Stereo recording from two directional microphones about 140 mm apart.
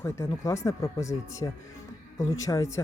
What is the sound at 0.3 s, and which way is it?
Speech, 20° left (ahead or behind).